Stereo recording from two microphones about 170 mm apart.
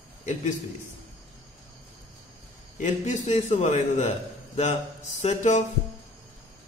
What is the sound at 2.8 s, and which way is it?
A man's voice, 45° left (ahead or behind).